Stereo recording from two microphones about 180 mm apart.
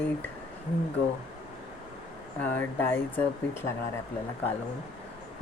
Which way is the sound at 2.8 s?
10° left (ahead or behind).